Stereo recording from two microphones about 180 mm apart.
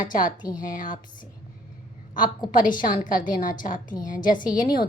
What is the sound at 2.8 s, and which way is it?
A woman's voice, 50° left (ahead or behind).